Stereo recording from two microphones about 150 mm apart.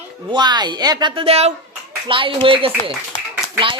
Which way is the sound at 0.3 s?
30° right (ahead or behind).